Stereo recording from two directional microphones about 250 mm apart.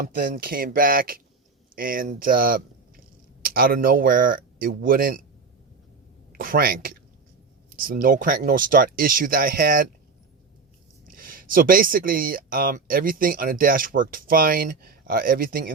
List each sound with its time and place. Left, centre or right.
0.0 s speech: right
6.3 s speech: right
11.0 s speech: right